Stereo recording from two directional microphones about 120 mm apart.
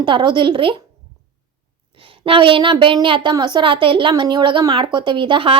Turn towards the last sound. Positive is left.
turn(degrees=-45)  # may be behind; listen again after turning